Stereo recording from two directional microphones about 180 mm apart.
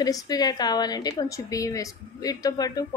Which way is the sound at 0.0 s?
20° left (ahead or behind).